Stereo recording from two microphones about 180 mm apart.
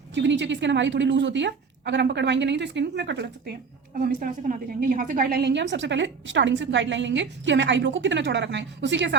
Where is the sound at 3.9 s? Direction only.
50° right (ahead or behind); by 9.1 s 80° right.